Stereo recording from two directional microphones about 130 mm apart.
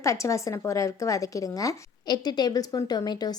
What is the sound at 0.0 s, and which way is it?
A woman's voice, 25° left (ahead or behind).